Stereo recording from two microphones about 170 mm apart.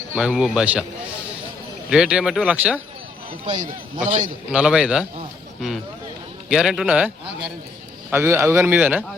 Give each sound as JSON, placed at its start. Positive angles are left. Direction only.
{"t": 0.2, "sound": "speech", "side_deg": -5}
{"t": 1.9, "sound": "speech", "side_deg": -5}
{"t": 3.4, "sound": "a man's voice", "side_deg": -50}
{"t": 4.5, "sound": "speech", "side_deg": -5}
{"t": 6.5, "sound": "speech", "side_deg": -5}
{"t": 8.1, "sound": "a man's voice", "side_deg": -15}